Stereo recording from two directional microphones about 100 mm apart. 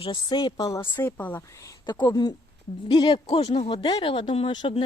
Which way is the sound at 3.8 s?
60° left (ahead or behind).